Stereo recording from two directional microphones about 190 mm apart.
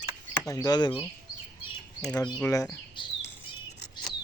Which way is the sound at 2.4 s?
15° left (ahead or behind).